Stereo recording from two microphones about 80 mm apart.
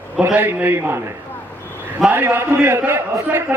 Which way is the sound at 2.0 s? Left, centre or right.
Right.